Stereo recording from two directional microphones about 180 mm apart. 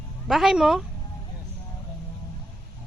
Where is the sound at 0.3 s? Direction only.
Centre (ahead or behind).